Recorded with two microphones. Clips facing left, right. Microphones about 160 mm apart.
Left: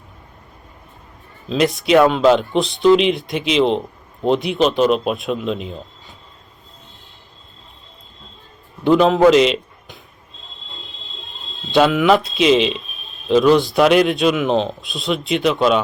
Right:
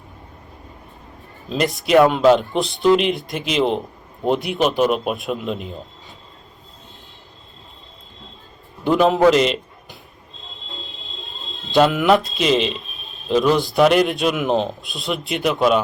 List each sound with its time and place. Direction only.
1.5 s a man's voice: centre (ahead or behind)
8.8 s a man's voice: 5° right (ahead or behind)
11.7 s a man's voice: centre (ahead or behind)